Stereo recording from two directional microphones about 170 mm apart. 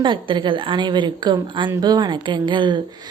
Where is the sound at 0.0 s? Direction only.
30° right (ahead or behind).